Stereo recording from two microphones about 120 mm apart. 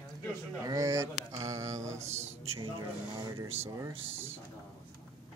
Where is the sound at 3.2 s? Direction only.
35° right (ahead or behind).